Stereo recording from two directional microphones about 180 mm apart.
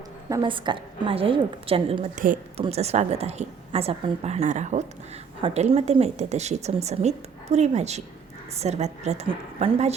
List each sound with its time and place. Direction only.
0.3 s a woman's voice: 25° right (ahead or behind)
2.1 s speech: 50° right (ahead or behind)
2.6 s speech: 35° right (ahead or behind)